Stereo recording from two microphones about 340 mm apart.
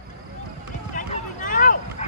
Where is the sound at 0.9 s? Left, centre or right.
Left.